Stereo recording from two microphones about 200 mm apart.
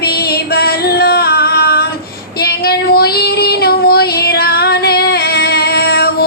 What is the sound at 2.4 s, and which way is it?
Child singing, 50° left (ahead or behind).